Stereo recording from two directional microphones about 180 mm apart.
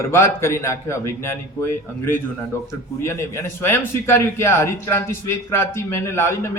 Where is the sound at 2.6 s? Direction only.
15° left (ahead or behind).